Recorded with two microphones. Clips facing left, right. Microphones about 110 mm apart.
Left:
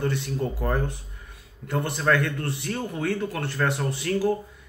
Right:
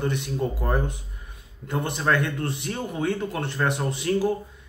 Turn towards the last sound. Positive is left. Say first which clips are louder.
# right 2 dB
turn(degrees=-20)  # may be behind; listen again after turning